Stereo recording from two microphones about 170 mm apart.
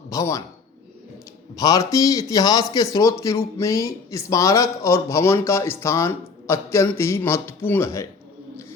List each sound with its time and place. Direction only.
0.1 s speech: 20° left (ahead or behind)
1.5 s a man's voice: 20° left (ahead or behind)